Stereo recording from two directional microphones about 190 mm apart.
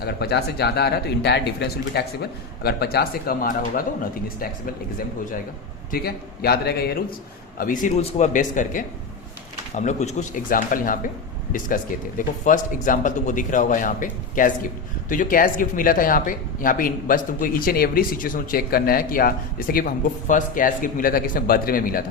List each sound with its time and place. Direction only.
0.0 s speech: 55° left (ahead or behind)
7.6 s speech: 45° left (ahead or behind)